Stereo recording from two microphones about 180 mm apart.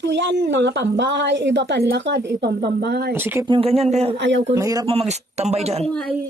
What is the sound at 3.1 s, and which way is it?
Speech, 10° right (ahead or behind).